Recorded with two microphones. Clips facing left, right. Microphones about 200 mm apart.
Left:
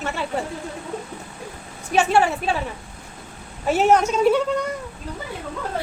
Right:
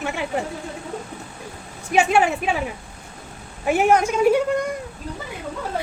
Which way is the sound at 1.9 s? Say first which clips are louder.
Even; 15° right (ahead or behind).